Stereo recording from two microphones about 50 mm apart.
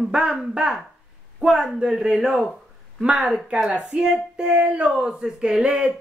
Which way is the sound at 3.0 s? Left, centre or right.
Centre.